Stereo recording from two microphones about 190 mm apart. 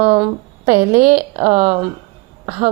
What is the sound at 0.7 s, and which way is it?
Speech, 45° right (ahead or behind).